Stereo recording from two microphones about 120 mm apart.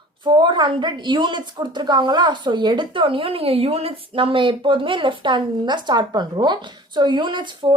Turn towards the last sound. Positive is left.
turn(degrees=-40)  # may be behind; listen again after turning